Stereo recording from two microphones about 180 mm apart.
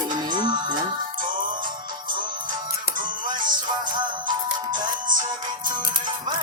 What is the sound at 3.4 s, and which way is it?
Music, 25° right (ahead or behind).